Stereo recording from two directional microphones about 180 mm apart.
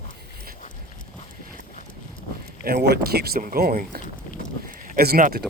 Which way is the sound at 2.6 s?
60° right (ahead or behind).